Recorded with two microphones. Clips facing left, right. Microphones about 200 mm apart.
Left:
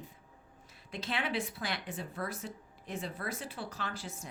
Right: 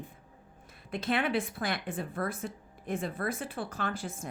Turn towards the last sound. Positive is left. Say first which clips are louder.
# right 6 dB
turn(degrees=-55)  # may be behind; listen again after turning